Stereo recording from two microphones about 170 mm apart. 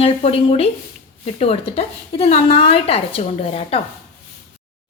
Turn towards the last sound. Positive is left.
turn(degrees=35)  # may be behind; listen again after turning